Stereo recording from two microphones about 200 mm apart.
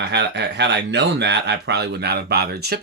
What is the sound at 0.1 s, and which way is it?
Speech, 60° right (ahead or behind).